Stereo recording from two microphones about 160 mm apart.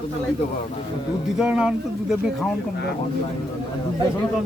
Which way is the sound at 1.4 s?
5° right (ahead or behind).